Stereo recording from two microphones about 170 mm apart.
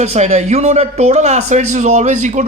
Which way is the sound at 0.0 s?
40° right (ahead or behind).